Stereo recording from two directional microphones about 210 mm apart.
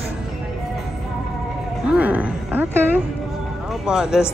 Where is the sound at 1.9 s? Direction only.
5° right (ahead or behind).